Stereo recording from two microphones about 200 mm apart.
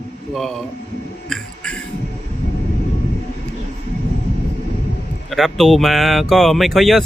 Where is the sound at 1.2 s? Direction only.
5° left (ahead or behind).